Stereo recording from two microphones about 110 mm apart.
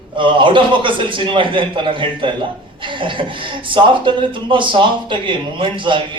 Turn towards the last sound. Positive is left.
turn(degrees=-50)  # may be behind; listen again after turning